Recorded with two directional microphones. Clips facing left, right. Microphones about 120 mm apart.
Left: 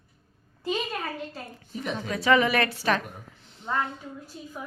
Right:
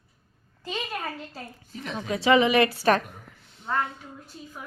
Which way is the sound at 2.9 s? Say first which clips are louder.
Right 3 dB; 45° right (ahead or behind).